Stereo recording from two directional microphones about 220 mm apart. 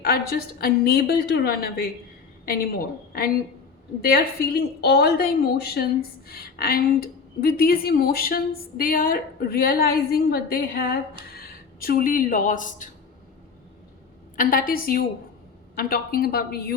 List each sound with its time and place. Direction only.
0.0 s a woman's voice: 45° left (ahead or behind)
4.0 s a woman's voice: 45° left (ahead or behind)
14.3 s a woman's voice: 40° left (ahead or behind)